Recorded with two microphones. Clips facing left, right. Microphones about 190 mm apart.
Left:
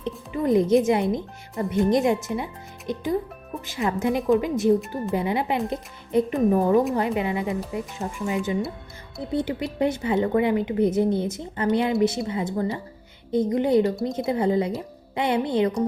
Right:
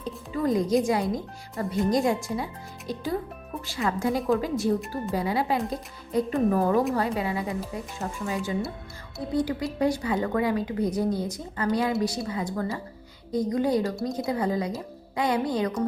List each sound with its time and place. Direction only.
0.3 s speech: 25° left (ahead or behind)